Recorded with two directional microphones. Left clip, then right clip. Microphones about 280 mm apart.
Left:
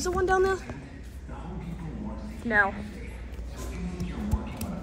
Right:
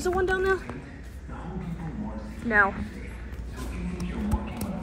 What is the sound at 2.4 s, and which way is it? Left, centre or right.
Speech, centre.